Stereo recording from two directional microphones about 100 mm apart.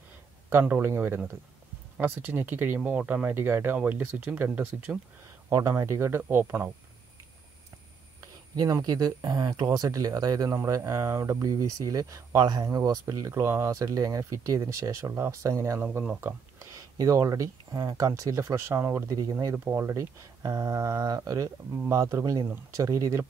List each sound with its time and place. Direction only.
0.5 s speech: 20° right (ahead or behind)
5.5 s speech: 30° right (ahead or behind)
8.2 s speech: 35° right (ahead or behind)